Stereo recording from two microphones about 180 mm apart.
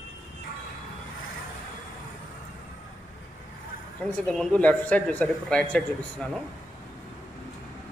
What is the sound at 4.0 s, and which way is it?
Speech, 5° left (ahead or behind).